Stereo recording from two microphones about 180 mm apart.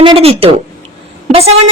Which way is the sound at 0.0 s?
30° right (ahead or behind).